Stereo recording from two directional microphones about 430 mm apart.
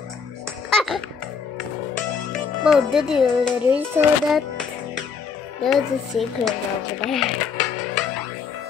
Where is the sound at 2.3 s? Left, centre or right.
Centre.